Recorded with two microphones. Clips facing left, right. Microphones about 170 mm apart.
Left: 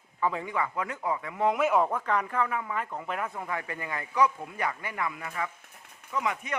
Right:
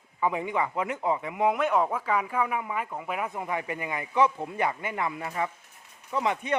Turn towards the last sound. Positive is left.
turn(degrees=-30)  # may be behind; listen again after turning